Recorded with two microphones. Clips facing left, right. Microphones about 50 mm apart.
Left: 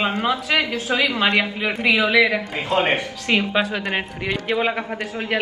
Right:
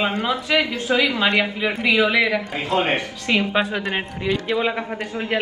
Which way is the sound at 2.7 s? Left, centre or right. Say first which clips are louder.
Left 1 dB; left.